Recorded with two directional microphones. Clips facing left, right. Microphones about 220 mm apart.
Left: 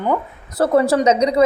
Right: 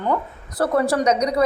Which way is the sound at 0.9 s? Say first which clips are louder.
Left 4 dB; 25° left (ahead or behind).